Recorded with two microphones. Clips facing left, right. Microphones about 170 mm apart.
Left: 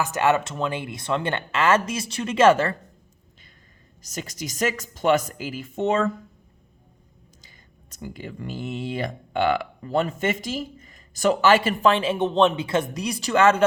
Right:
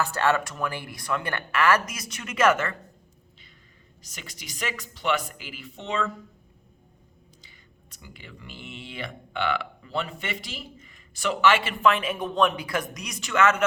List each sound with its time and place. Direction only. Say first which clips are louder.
0.0 s speech: left 3 dB; 15° left (ahead or behind)
4.0 s speech: left 11 dB; 40° left (ahead or behind)
7.4 s speech: left 1 dB; 40° left (ahead or behind)